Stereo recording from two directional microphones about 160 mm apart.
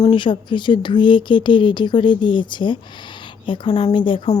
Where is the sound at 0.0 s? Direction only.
30° left (ahead or behind).